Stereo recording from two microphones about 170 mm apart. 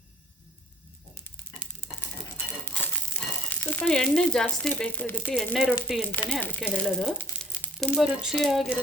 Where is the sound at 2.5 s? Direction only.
10° left (ahead or behind).